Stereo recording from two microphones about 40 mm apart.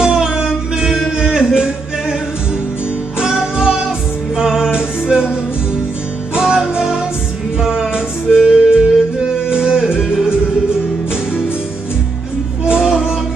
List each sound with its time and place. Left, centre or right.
0.0 s music: right
3.2 s music: centre
12.6 s music: centre